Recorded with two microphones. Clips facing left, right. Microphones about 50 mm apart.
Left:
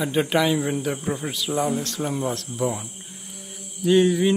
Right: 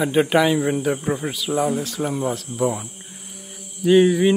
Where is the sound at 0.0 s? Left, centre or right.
Centre.